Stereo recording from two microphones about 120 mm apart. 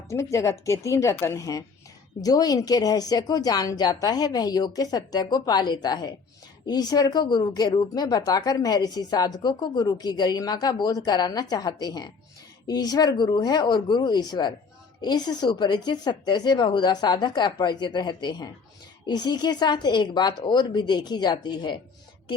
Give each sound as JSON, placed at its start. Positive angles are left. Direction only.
{"t": 0.1, "sound": "a woman's voice", "side_deg": 25}